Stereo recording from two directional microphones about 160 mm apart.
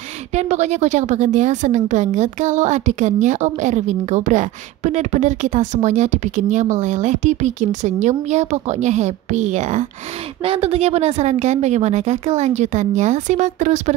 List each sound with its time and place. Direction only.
0.3 s a woman's voice: 45° right (ahead or behind)